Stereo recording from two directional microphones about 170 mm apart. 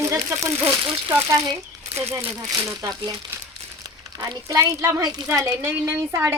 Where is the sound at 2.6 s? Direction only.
20° right (ahead or behind).